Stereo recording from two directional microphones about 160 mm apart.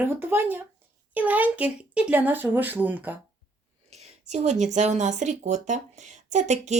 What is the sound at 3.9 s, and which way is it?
Speech, 45° right (ahead or behind).